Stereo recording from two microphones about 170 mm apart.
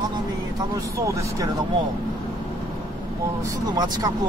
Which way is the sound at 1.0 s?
20° right (ahead or behind).